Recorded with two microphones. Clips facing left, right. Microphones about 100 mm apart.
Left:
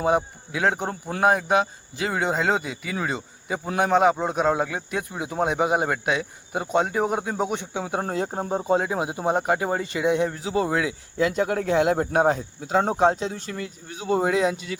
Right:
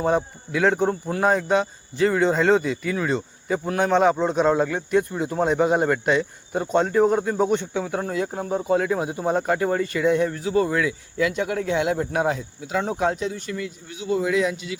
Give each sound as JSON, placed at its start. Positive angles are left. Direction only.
{"t": 0.2, "sound": "a man's voice", "side_deg": 5}
{"t": 8.0, "sound": "speech", "side_deg": 35}
{"t": 11.3, "sound": "speech", "side_deg": 40}